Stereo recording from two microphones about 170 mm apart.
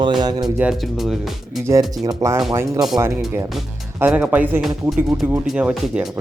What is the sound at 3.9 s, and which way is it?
Speech, 10° right (ahead or behind).